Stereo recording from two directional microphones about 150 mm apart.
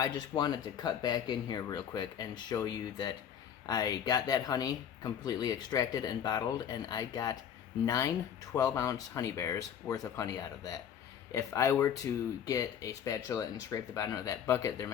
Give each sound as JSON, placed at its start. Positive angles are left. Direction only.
{"t": 0.0, "sound": "speech", "side_deg": 30}